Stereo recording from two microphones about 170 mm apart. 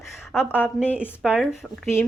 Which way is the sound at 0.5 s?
10° left (ahead or behind).